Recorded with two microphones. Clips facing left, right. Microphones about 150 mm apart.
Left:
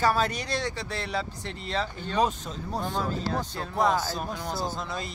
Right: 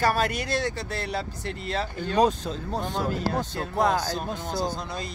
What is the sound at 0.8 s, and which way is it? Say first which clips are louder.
Speech: right 1 dB; 50° right (ahead or behind).